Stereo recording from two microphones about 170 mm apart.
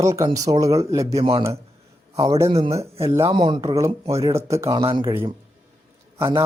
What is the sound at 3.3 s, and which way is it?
Speech, 25° right (ahead or behind).